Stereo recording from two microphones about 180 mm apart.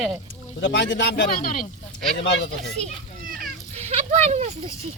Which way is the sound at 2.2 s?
80° left.